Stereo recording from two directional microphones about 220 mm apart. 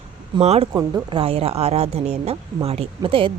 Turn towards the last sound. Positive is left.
turn(degrees=-25)  # may be behind; listen again after turning